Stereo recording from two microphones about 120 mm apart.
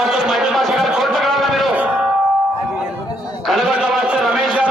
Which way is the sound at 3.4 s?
Centre (ahead or behind).